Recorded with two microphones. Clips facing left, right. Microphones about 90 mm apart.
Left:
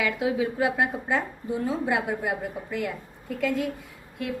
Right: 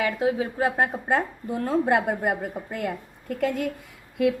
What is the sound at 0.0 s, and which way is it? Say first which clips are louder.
Speech: right 1 dB; 40° right (ahead or behind).